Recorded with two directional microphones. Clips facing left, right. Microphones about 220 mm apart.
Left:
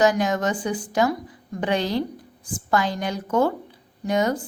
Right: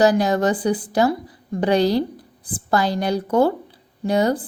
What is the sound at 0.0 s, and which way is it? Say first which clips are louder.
A woman's voice: right 4 dB; 35° right (ahead or behind).